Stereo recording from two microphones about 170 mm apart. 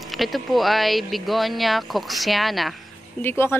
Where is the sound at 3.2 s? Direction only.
15° left (ahead or behind).